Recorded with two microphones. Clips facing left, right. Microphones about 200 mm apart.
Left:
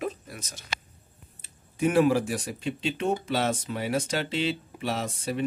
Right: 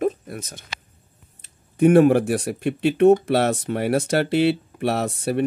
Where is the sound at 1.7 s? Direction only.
55° right (ahead or behind).